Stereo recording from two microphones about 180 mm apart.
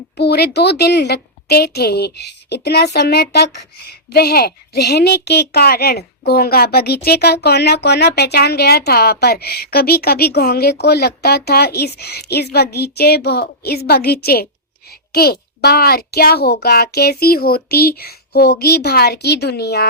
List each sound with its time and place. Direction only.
0.2 s a woman's voice: 65° left (ahead or behind)